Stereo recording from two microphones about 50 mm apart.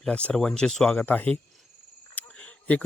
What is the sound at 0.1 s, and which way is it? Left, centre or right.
Speech, left.